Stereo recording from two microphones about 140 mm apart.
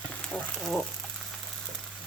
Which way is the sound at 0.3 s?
5° left (ahead or behind).